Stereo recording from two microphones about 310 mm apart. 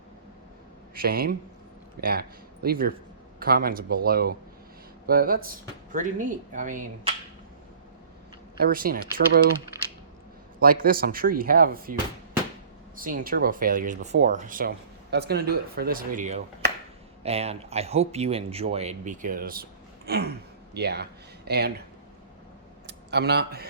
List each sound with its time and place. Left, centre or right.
0.9 s speech: right
8.5 s speech: right
9.7 s coin: centre
10.6 s speech: right
13.0 s speech: right
20.1 s a sound: right
20.7 s speech: right
22.9 s speech: right